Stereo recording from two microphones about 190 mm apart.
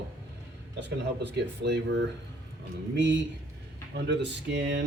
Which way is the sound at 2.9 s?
65° right (ahead or behind).